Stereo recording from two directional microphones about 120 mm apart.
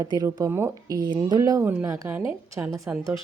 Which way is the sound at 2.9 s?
15° right (ahead or behind).